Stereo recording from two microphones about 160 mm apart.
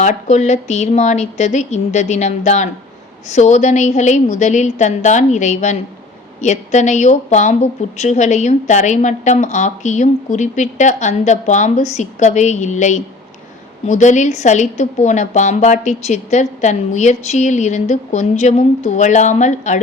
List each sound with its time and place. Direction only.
0.0 s speech: 50° left (ahead or behind)